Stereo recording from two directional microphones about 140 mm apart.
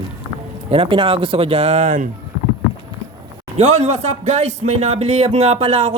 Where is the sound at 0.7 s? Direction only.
40° right (ahead or behind); by 2.1 s 65° right (ahead or behind).